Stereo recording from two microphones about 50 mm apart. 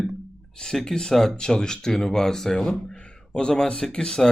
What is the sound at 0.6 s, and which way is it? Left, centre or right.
Speech, centre.